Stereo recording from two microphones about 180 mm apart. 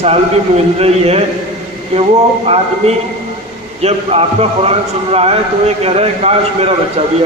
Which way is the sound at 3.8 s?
35° right (ahead or behind).